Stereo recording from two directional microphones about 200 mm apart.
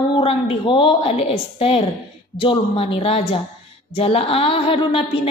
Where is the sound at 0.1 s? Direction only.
30° left (ahead or behind).